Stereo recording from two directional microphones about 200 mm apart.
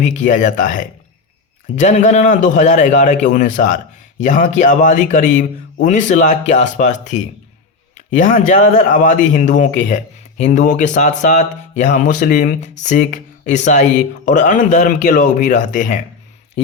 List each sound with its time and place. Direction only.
0.0 s speech: 40° left (ahead or behind)